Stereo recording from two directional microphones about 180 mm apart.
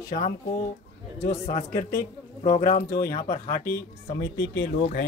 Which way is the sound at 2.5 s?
40° left (ahead or behind).